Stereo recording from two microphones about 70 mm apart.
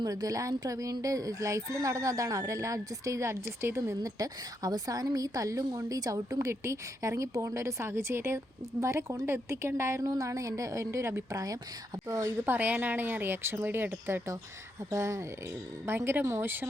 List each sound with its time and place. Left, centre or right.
0.0 s speech: right
12.5 s speech: right
14.8 s speech: right
15.9 s speech: right